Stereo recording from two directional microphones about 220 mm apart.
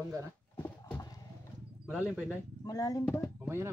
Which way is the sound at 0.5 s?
10° left (ahead or behind).